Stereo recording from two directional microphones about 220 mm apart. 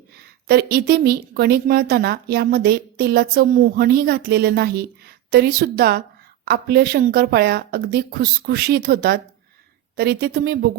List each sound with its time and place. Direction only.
0.4 s a woman's voice: 45° right (ahead or behind)